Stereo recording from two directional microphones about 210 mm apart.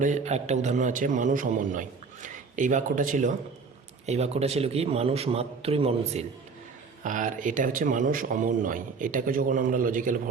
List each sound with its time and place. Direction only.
0.0 s a man's voice: 35° right (ahead or behind)